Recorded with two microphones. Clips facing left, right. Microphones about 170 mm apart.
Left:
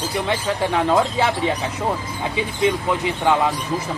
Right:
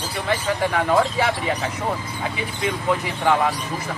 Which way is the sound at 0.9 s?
20° left (ahead or behind).